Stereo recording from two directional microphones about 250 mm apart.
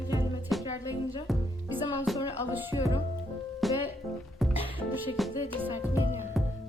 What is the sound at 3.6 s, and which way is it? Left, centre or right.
Music, centre.